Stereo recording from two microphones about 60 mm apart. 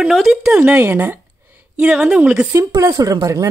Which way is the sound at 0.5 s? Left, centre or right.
Right.